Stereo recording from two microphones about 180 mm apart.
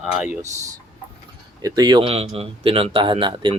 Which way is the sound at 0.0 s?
Centre (ahead or behind).